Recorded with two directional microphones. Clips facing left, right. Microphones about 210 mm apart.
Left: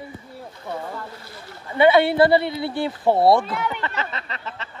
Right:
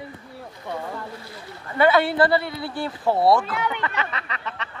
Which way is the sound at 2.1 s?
25° left (ahead or behind).